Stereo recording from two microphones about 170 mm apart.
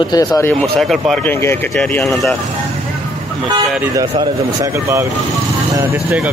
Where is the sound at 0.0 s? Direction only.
25° left (ahead or behind).